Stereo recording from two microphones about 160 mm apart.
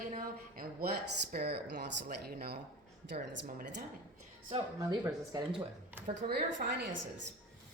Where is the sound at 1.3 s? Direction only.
85° right.